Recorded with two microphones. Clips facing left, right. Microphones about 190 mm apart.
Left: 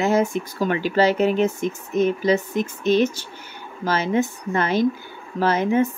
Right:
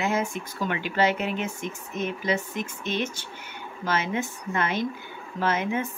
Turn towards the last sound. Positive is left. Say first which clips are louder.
# left 7 dB
turn(degrees=35)  # may be behind; listen again after turning